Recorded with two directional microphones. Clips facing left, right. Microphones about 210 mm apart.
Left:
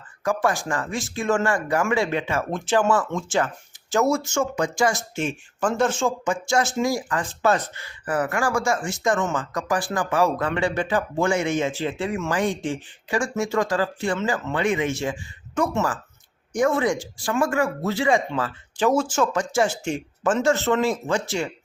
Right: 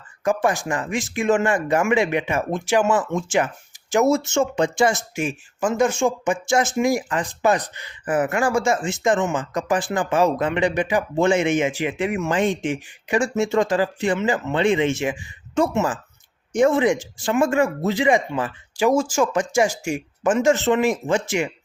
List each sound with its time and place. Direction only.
0.3 s speech: 20° right (ahead or behind)
5.1 s speech: 10° right (ahead or behind)